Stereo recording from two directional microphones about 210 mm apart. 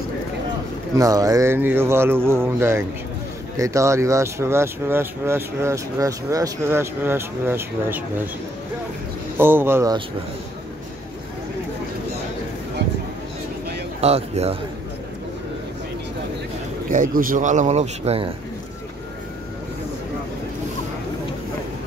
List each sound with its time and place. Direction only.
0.9 s speech: 15° right (ahead or behind)
9.4 s speech: 10° right (ahead or behind)
14.0 s speech: 30° right (ahead or behind)
16.9 s speech: 40° right (ahead or behind)